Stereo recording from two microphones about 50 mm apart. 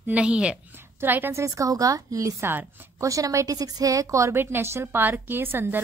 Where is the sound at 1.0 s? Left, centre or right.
Right.